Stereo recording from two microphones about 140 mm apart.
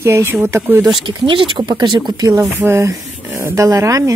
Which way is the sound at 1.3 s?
35° right (ahead or behind).